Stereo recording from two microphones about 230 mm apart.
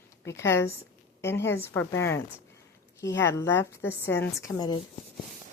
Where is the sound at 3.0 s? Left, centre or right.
Centre.